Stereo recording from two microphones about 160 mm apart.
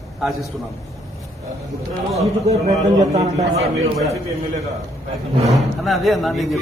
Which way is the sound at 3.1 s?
45° right (ahead or behind).